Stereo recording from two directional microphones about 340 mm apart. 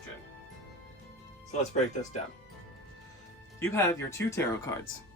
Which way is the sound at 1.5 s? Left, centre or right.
Left.